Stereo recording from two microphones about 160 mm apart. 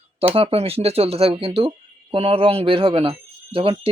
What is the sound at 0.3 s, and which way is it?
Speech, 40° right (ahead or behind).